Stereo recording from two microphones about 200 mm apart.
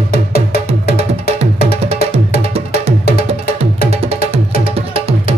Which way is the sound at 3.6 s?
30° right (ahead or behind).